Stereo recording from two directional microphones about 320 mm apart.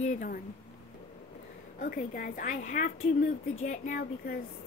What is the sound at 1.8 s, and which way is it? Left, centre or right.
Speech, left.